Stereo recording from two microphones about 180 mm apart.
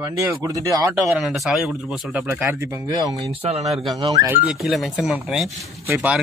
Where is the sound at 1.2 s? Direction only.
Centre (ahead or behind); by 4.3 s 20° right (ahead or behind).